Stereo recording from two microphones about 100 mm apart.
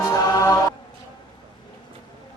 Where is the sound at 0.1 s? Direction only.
35° left (ahead or behind).